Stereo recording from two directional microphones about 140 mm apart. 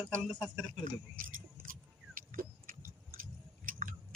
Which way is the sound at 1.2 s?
80° right.